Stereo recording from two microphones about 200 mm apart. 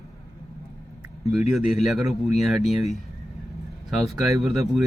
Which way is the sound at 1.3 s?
Centre (ahead or behind).